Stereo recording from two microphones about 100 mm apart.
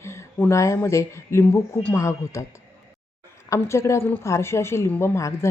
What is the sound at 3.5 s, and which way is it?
A woman's voice, 30° left (ahead or behind).